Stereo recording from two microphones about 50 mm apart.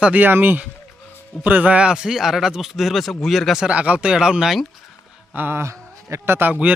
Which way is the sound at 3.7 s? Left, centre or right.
Right.